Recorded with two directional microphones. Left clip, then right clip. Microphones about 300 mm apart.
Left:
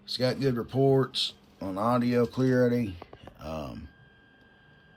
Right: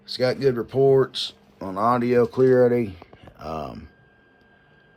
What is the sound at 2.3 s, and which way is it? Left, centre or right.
Speech, right.